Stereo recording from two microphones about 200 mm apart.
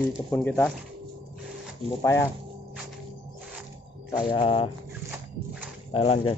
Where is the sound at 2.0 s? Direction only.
15° left (ahead or behind).